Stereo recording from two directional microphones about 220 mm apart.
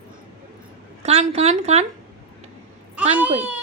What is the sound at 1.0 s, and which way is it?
Speech, 30° right (ahead or behind).